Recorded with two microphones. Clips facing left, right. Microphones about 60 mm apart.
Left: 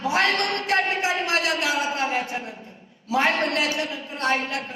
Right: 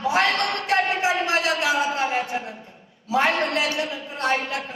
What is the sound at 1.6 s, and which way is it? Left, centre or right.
A man's voice, centre.